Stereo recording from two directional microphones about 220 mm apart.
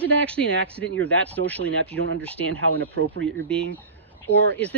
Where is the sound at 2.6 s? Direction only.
60° right (ahead or behind).